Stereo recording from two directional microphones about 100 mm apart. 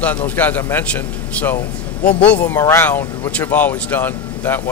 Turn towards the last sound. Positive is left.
turn(degrees=20)  # may be behind; listen again after turning